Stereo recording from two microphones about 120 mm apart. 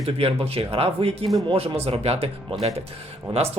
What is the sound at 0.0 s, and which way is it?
Speech, 55° right (ahead or behind).